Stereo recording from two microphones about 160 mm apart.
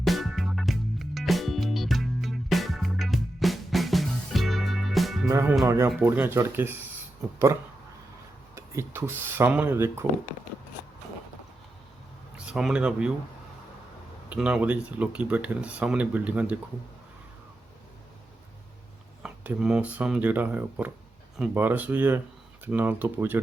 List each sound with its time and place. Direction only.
0.0 s music: centre (ahead or behind)
5.3 s speech: 15° right (ahead or behind)
8.5 s speech: 15° right (ahead or behind)
12.5 s speech: 5° right (ahead or behind)
14.3 s speech: 5° right (ahead or behind)
19.2 s speech: 5° right (ahead or behind)